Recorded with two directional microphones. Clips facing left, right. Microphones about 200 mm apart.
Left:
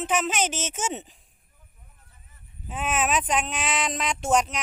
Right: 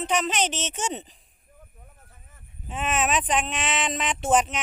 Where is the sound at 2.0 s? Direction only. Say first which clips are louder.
Right 5 dB; 50° right (ahead or behind).